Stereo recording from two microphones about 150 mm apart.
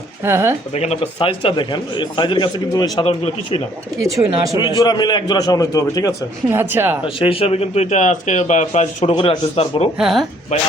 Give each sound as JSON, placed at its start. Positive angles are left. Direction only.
{"t": 0.3, "sound": "speech", "side_deg": -15}
{"t": 0.7, "sound": "speech", "side_deg": 45}
{"t": 3.9, "sound": "speech", "side_deg": -20}
{"t": 4.5, "sound": "a man's voice", "side_deg": 30}
{"t": 6.5, "sound": "speech", "side_deg": -15}
{"t": 7.2, "sound": "speech", "side_deg": 40}
{"t": 9.1, "sound": "speech", "side_deg": 35}
{"t": 10.0, "sound": "speech", "side_deg": 0}